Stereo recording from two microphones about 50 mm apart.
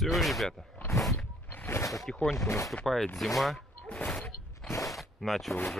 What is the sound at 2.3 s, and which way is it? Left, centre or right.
Speech, left.